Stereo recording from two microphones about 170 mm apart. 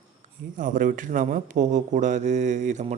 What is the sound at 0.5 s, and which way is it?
Speech, 50° right (ahead or behind).